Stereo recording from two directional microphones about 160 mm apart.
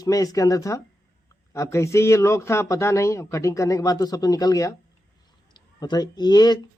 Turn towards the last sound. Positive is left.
turn(degrees=25)  # may be behind; listen again after turning